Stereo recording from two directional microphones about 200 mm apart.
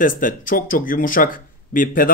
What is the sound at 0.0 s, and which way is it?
Speech, 45° left (ahead or behind).